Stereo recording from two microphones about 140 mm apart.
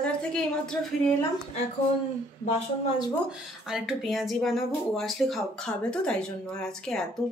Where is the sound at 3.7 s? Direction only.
Centre (ahead or behind).